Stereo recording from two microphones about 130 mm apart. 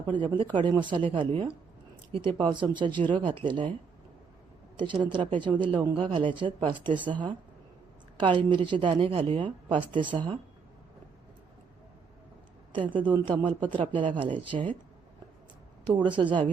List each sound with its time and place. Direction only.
0.1 s a woman's voice: 40° right (ahead or behind)
4.8 s a woman's voice: 40° right (ahead or behind)
8.2 s a woman's voice: 40° right (ahead or behind)
12.7 s a woman's voice: 40° right (ahead or behind)
16.0 s a woman's voice: 40° right (ahead or behind)